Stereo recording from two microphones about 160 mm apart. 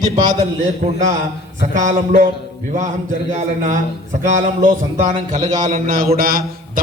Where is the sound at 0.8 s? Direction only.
45° right (ahead or behind).